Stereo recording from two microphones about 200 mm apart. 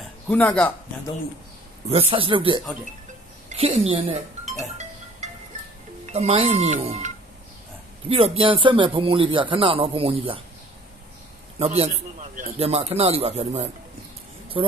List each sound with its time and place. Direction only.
0.0 s speech: 5° left (ahead or behind)
1.9 s speech: 30° right (ahead or behind)
6.0 s a man's voice: 30° right (ahead or behind)
8.1 s speech: 30° right (ahead or behind)
11.5 s a man's voice: 30° right (ahead or behind)